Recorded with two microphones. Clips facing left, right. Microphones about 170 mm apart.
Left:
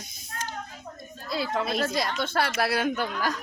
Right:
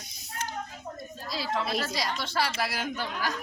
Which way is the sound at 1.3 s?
50° left (ahead or behind).